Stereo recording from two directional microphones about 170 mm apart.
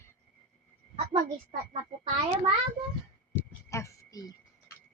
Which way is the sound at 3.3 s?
15° left (ahead or behind).